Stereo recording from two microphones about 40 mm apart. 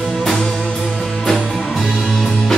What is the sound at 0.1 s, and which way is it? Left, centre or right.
Music, centre.